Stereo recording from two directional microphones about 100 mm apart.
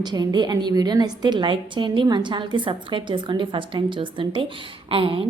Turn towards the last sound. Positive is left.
turn(degrees=-65)  # may be behind; listen again after turning